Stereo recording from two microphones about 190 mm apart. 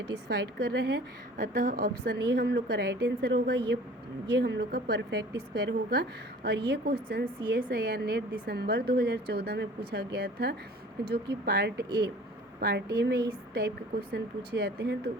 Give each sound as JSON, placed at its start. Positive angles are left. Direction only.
{"t": 0.3, "sound": "a woman's voice", "side_deg": -65}
{"t": 1.4, "sound": "a woman's voice", "side_deg": -50}